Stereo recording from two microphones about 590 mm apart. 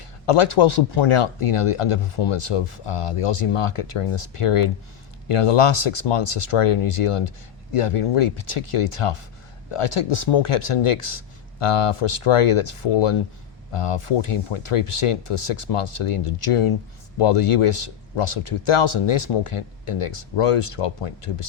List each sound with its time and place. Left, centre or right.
0.0 s speech: left